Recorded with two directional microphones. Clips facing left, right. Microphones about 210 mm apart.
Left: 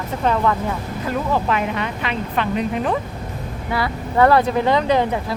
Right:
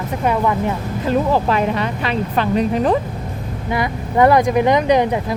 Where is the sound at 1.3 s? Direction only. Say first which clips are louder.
Right 4 dB; 35° right (ahead or behind).